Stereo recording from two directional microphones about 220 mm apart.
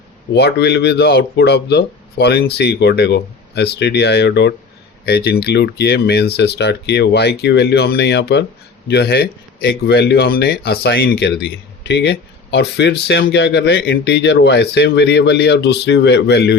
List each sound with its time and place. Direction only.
0.3 s speech: 50° left (ahead or behind)